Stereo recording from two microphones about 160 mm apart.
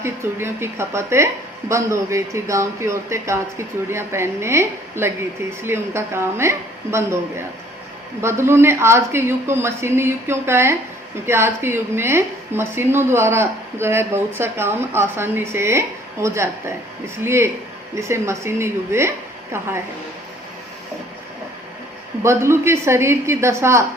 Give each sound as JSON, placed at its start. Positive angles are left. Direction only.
{"t": 0.0, "sound": "a woman's voice", "side_deg": -15}
{"t": 22.2, "sound": "a woman's voice", "side_deg": -15}